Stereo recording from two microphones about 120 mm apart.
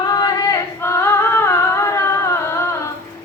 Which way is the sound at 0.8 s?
20° left (ahead or behind).